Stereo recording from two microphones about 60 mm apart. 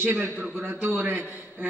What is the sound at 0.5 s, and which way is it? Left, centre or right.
Speech, right.